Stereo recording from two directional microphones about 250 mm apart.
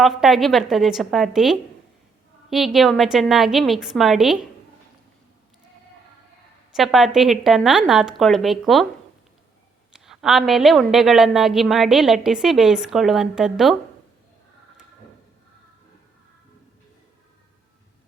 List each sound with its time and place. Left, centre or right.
0.0 s a woman's voice: centre
6.7 s a woman's voice: centre
9.9 s a woman's voice: centre